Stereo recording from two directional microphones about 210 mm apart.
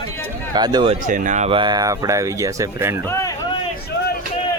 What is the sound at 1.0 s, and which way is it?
Speech, 40° right (ahead or behind).